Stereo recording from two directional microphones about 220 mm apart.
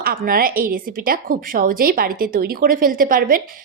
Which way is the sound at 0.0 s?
40° right (ahead or behind).